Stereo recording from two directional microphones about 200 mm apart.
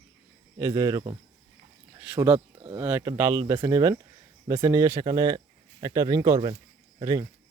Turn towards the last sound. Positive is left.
turn(degrees=-15)  # may be behind; listen again after turning